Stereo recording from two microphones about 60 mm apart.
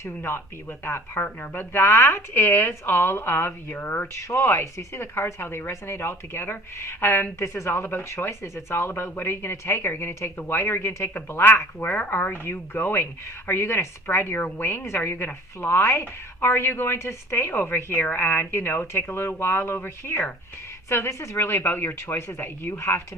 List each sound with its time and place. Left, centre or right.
0.9 s speech: left
4.1 s speech: left
7.7 s speech: left
20.9 s a woman's voice: left
21.3 s speech: left